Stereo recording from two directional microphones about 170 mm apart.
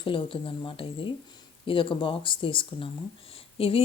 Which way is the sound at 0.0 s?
30° left (ahead or behind).